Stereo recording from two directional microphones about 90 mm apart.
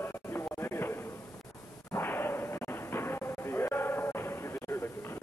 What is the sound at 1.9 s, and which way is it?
Whip, 25° left (ahead or behind).